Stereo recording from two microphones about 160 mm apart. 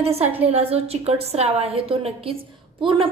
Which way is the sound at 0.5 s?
40° right (ahead or behind).